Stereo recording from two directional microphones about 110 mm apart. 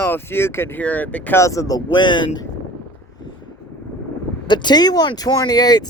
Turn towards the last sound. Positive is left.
turn(degrees=35)  # may be behind; listen again after turning